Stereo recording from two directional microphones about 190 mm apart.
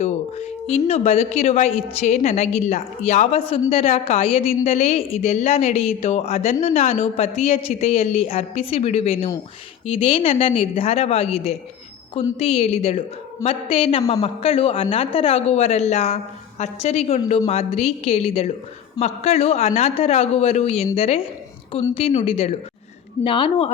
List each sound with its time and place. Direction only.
0.0 s a woman's voice: 35° left (ahead or behind)